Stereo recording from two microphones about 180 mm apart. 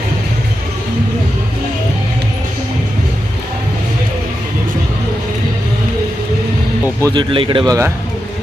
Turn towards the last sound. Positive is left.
turn(degrees=-20)  # may be behind; listen again after turning